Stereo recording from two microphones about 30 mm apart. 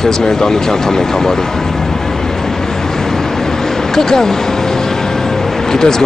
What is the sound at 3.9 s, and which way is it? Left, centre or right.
Speech, centre.